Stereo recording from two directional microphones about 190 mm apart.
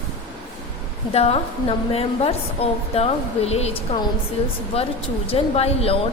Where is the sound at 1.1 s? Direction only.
30° left (ahead or behind).